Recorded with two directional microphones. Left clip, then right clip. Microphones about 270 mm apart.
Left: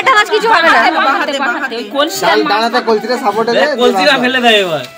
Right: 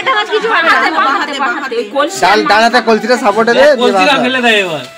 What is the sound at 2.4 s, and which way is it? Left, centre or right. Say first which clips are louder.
Speech: right 4 dB; right.